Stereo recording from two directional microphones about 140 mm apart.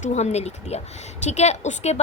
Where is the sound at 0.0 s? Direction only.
55° left (ahead or behind).